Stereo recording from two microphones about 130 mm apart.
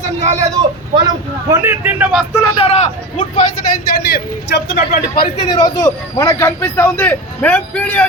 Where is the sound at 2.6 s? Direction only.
55° left (ahead or behind).